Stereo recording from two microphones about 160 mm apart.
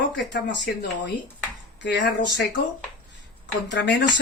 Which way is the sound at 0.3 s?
90° left.